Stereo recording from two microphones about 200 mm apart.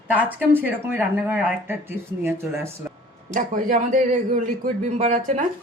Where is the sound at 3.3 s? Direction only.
40° right (ahead or behind).